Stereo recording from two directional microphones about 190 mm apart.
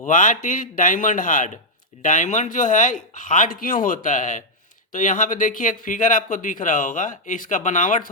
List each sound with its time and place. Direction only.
0.0 s speech: 40° left (ahead or behind)